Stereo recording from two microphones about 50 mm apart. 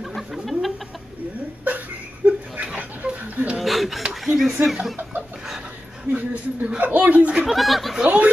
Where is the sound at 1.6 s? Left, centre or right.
Right.